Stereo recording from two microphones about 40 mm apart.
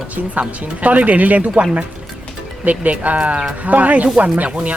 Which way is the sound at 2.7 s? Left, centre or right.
Right.